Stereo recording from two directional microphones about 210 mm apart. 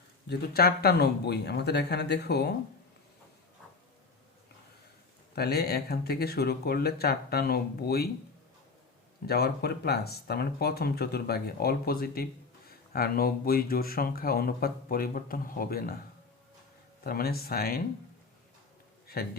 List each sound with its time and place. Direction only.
0.3 s speech: 50° left (ahead or behind)
5.3 s speech: 50° left (ahead or behind)
9.2 s speech: 50° left (ahead or behind)
17.0 s speech: 45° left (ahead or behind)